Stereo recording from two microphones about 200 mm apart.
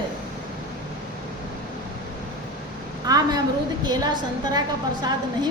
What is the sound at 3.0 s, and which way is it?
A woman's voice, 20° right (ahead or behind).